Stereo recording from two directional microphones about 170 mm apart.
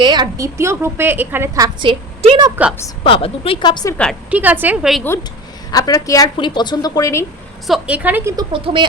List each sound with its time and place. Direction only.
0.0 s a woman's voice: 25° right (ahead or behind)
3.0 s speech: 35° left (ahead or behind)
4.3 s speech: 10° right (ahead or behind)
5.7 s a woman's voice: 20° left (ahead or behind)
7.7 s speech: 10° right (ahead or behind)
8.5 s a woman's voice: 30° right (ahead or behind)